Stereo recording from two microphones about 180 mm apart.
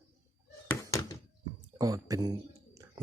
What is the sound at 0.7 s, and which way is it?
Thunk, 15° left (ahead or behind).